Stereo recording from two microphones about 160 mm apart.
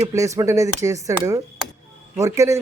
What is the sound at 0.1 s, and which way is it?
Speech, 20° right (ahead or behind).